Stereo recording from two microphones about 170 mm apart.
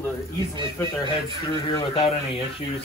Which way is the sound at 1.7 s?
30° left (ahead or behind).